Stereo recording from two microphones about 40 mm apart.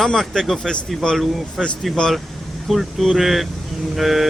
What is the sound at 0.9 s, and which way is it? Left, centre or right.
Speech, centre.